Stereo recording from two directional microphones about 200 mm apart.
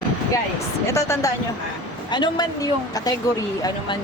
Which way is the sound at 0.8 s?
15° left (ahead or behind).